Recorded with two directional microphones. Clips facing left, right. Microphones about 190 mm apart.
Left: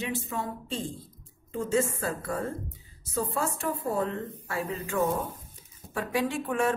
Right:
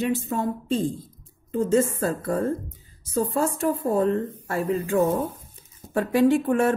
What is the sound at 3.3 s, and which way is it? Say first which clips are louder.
Speech: right 7 dB; 35° right (ahead or behind).